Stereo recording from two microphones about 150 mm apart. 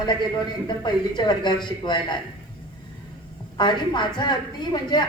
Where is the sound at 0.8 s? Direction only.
30° left (ahead or behind).